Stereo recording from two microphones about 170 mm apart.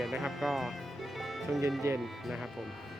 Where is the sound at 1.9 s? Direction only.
15° right (ahead or behind).